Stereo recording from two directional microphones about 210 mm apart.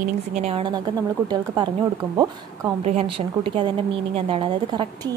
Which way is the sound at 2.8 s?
30° right (ahead or behind).